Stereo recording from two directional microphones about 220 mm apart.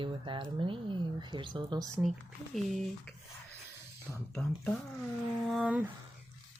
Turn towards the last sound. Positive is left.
turn(degrees=-5)  # may be behind; listen again after turning